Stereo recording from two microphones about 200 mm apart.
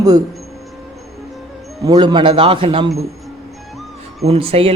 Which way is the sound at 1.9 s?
20° right (ahead or behind).